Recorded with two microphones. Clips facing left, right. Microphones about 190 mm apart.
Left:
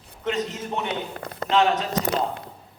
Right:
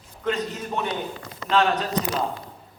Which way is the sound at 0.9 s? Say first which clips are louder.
Even; 60° left (ahead or behind).